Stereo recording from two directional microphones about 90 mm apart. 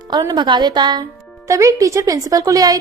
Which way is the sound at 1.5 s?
35° right (ahead or behind).